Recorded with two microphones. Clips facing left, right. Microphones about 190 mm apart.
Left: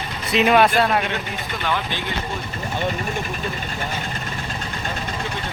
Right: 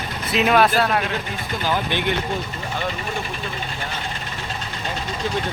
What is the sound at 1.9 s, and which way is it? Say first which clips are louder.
Speech: right 6 dB; 65° right (ahead or behind).